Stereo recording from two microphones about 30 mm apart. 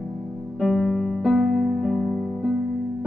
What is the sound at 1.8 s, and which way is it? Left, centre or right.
Music, centre.